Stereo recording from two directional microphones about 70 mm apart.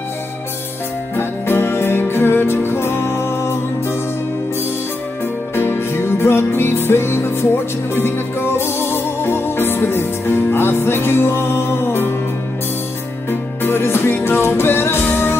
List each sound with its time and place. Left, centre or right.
1.1 s music: left
5.5 s music: left
13.6 s music: left